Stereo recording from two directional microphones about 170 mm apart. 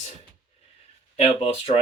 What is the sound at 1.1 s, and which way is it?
Speech, 35° left (ahead or behind).